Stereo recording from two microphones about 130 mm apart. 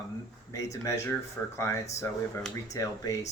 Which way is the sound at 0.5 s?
25° left (ahead or behind).